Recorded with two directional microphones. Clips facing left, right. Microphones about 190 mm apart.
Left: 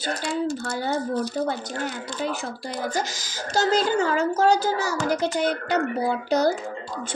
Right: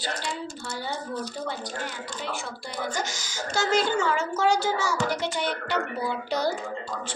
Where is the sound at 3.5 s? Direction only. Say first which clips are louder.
Left 3 dB; 35° left (ahead or behind).